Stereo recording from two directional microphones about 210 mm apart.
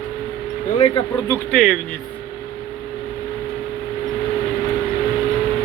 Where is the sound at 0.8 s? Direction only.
25° left (ahead or behind).